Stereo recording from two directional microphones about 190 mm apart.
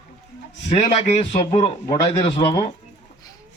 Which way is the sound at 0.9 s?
30° left (ahead or behind).